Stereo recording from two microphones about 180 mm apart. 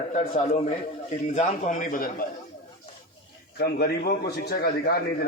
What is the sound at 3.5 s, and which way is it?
A man's voice, 60° left (ahead or behind).